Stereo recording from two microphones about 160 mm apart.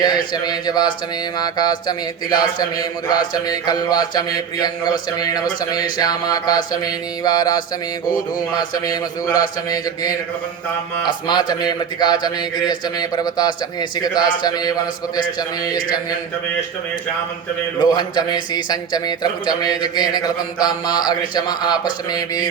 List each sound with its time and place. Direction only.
0.0 s a man's voice: 25° left (ahead or behind)
9.6 s a man's voice: 25° left (ahead or behind)
11.3 s a man's voice: 25° left (ahead or behind)
17.7 s a man's voice: 30° left (ahead or behind)